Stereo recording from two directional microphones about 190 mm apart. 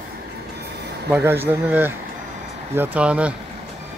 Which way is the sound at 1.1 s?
10° right (ahead or behind).